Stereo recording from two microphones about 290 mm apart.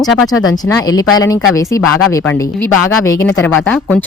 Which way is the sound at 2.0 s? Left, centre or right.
Left.